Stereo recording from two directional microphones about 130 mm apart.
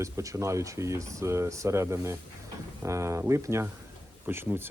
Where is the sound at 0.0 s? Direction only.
25° right (ahead or behind).